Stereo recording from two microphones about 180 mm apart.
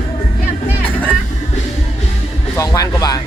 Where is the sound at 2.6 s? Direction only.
20° left (ahead or behind).